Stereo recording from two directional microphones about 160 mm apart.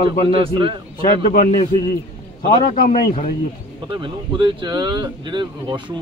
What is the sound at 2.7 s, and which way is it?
Speech, 65° left (ahead or behind).